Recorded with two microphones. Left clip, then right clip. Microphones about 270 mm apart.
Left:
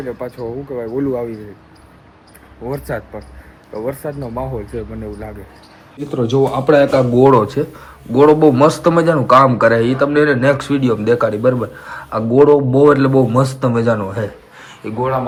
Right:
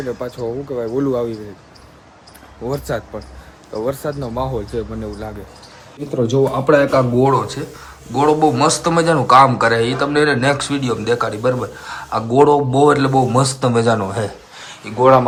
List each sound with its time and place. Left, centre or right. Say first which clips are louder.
0.2 s speech: right 1 dB; centre
2.6 s speech: right 1 dB; centre
6.1 s speech: left 1 dB; centre
14.8 s speech: left 5 dB; centre